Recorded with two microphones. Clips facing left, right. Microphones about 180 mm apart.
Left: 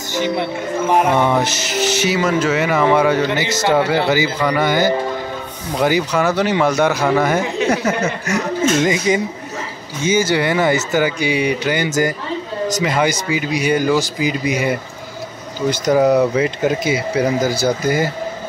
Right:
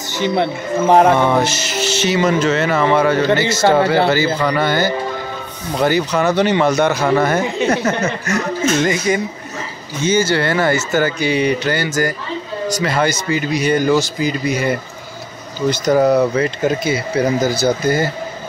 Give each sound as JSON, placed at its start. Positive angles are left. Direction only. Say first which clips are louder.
{"t": 1.1, "sound": "speech", "louder": "right 1 dB", "side_deg": 15}